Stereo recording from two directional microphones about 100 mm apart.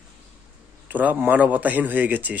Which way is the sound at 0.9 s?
15° right (ahead or behind).